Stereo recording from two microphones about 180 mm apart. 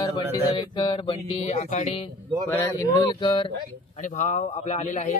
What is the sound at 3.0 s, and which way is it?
Speech, 25° left (ahead or behind).